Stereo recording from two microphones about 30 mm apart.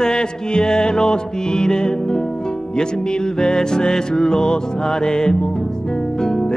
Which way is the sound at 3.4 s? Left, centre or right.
Left.